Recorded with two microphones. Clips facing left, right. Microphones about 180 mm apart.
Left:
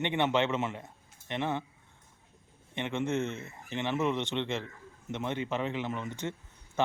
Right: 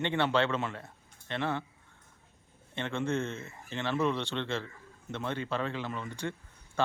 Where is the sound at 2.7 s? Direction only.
15° left (ahead or behind).